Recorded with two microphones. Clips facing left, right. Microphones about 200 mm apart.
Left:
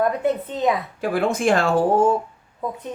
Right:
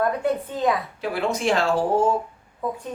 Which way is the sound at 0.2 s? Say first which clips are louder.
Left 2 dB; 20° left (ahead or behind).